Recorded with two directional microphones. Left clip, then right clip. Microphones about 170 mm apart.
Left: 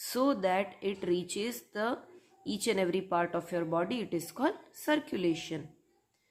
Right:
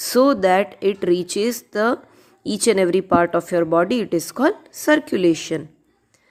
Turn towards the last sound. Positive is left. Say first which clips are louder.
# right 14 dB
turn(degrees=-40)  # may be behind; listen again after turning